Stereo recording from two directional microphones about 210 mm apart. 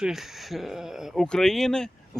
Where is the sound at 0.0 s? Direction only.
Centre (ahead or behind).